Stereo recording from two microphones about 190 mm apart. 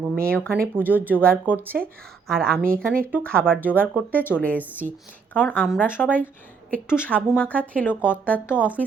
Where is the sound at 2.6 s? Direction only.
50° right (ahead or behind).